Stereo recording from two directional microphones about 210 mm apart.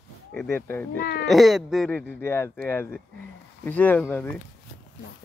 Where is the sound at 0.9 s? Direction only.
45° left (ahead or behind).